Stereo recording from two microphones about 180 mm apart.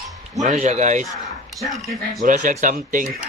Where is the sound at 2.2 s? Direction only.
45° right (ahead or behind).